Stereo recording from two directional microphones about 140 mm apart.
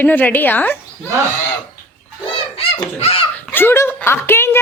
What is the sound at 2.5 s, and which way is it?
Speech, 45° left (ahead or behind).